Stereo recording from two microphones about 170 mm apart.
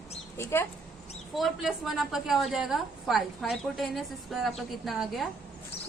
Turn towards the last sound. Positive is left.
turn(degrees=0)  # may be behind; listen again after turning